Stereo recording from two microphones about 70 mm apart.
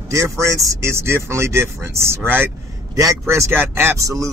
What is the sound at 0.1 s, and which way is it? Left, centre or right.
Speech, right.